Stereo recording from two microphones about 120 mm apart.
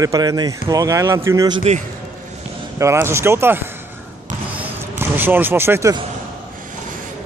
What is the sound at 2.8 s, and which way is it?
Speech, 20° right (ahead or behind).